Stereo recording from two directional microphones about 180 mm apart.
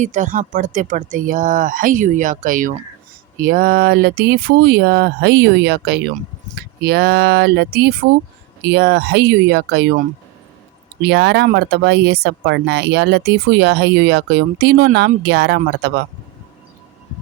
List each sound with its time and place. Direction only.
0.0 s speech: 45° right (ahead or behind); by 9.9 s 65° right (ahead or behind)
11.0 s speech: 70° right (ahead or behind)